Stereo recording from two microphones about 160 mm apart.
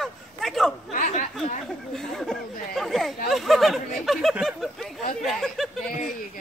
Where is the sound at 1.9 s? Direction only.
5° left (ahead or behind).